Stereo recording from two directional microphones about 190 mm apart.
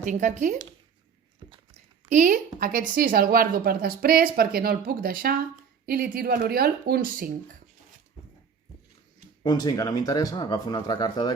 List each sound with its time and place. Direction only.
0.0 s speech: 40° right (ahead or behind)
2.0 s a woman's voice: 40° right (ahead or behind)
9.4 s speech: 20° left (ahead or behind)